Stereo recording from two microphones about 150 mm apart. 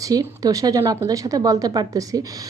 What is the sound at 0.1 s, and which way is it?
A woman's voice, 25° right (ahead or behind).